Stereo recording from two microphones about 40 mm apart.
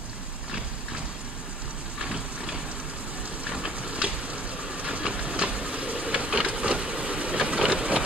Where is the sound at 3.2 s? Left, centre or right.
Right.